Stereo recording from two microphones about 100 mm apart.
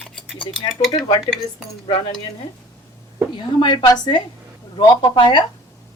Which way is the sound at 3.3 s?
50° left (ahead or behind).